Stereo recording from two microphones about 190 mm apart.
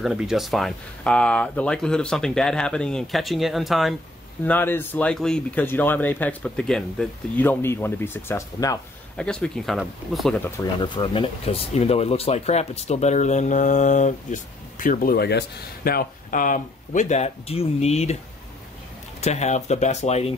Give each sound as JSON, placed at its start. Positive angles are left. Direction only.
{"t": 0.0, "sound": "speech", "side_deg": 0}
{"t": 4.5, "sound": "speech", "side_deg": 10}
{"t": 9.1, "sound": "speech", "side_deg": 5}
{"t": 10.4, "sound": "speech", "side_deg": 20}
{"t": 19.2, "sound": "speech", "side_deg": 35}